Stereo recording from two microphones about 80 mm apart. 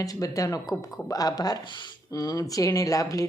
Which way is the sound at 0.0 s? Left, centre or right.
Left.